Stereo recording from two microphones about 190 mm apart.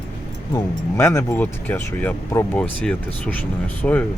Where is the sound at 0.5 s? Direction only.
15° left (ahead or behind).